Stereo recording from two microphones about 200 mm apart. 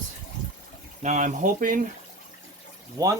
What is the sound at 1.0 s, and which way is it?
Speech, 35° right (ahead or behind).